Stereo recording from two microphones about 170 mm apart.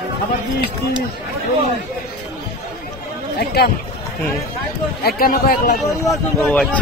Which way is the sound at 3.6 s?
70° left (ahead or behind).